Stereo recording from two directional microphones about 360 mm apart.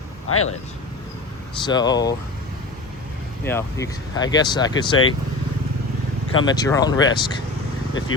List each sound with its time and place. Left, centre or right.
0.3 s speech: left
1.6 s speech: centre
3.4 s speech: centre
6.3 s speech: centre